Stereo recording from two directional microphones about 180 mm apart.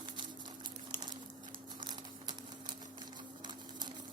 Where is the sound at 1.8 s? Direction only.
25° right (ahead or behind).